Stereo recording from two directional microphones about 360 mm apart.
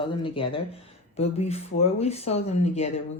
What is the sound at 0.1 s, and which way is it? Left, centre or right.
Speech, centre.